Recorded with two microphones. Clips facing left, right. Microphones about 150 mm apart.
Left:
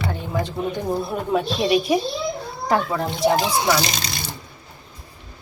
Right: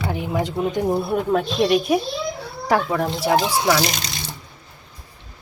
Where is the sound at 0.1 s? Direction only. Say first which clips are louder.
Right 2 dB; 15° right (ahead or behind).